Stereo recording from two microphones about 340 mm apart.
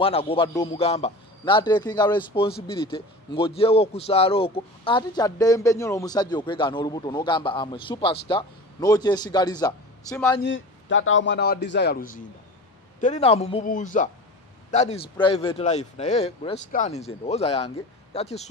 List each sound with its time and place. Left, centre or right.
0.0 s a man's voice: centre
10.4 s a man's voice: left; by 18.5 s centre